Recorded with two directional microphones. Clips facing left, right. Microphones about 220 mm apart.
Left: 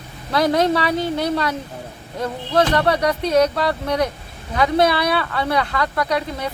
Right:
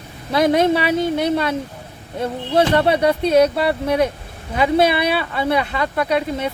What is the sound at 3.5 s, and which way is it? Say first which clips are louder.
Speech: right 3 dB; 10° right (ahead or behind).